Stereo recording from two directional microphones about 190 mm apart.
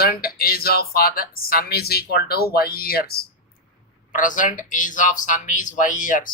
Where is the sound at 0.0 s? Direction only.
55° left (ahead or behind).